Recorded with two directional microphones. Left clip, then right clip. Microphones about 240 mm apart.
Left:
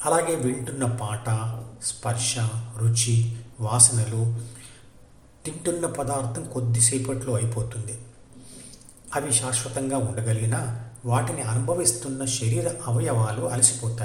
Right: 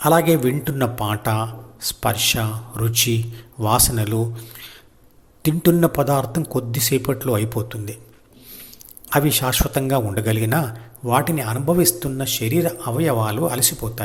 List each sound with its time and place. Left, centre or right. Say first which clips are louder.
0.0 s a man's voice: right 7 dB; right
5.4 s a man's voice: right 10 dB; right
9.0 s a man's voice: right 8 dB; right